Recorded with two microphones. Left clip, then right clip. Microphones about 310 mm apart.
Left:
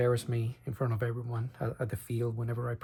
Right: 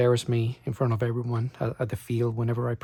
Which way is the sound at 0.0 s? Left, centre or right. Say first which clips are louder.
Right 6 dB; centre.